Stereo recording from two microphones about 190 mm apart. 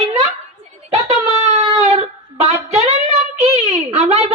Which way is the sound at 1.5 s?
35° right (ahead or behind).